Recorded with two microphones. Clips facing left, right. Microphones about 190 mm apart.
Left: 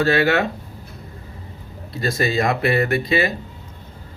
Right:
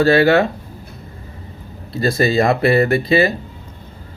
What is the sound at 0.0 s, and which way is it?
Speech, 30° right (ahead or behind).